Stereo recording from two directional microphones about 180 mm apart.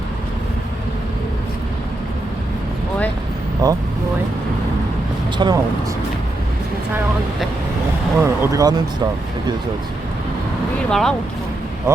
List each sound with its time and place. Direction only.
3.6 s speech: 20° right (ahead or behind)
5.4 s speech: 25° right (ahead or behind)
8.2 s a sound: 15° right (ahead or behind)
10.8 s speech: 5° left (ahead or behind)